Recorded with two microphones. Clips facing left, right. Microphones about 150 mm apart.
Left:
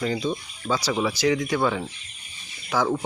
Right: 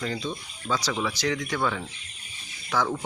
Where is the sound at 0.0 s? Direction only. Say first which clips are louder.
Left 5 dB; 10° left (ahead or behind).